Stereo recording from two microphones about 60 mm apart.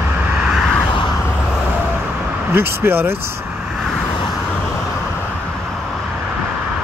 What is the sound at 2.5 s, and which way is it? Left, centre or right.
Speech, right.